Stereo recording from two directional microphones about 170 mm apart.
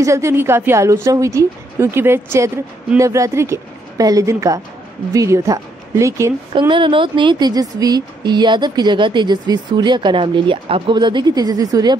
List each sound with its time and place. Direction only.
0.0 s a woman's voice: 15° right (ahead or behind)
6.7 s a woman's voice: 30° right (ahead or behind)